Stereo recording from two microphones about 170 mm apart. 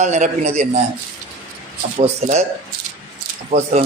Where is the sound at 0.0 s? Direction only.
45° right (ahead or behind).